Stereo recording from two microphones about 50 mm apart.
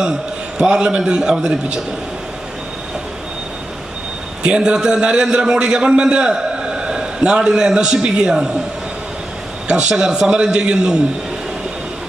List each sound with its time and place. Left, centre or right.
0.6 s a man's voice: centre
4.4 s a man's voice: centre
9.7 s a man's voice: centre